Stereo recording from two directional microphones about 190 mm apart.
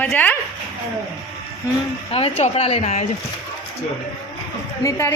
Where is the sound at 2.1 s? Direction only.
30° left (ahead or behind).